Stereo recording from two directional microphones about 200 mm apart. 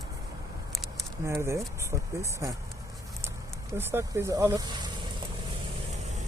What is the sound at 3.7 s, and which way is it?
Speech, 10° right (ahead or behind).